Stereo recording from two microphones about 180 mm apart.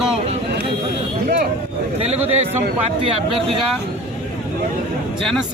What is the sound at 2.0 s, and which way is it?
Speech, 35° right (ahead or behind).